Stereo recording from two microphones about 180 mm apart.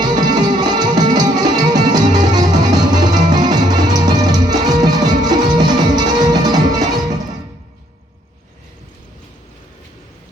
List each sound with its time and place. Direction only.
0.0 s music: 25° right (ahead or behind)